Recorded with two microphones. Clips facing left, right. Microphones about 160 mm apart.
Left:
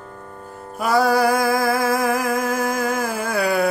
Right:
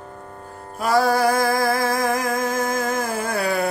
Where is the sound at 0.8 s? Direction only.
Centre (ahead or behind).